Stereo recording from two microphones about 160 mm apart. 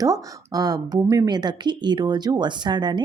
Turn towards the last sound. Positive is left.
turn(degrees=-25)  # may be behind; listen again after turning